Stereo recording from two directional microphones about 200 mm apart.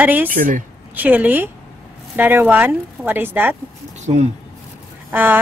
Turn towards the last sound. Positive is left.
turn(degrees=-10)  # may be behind; listen again after turning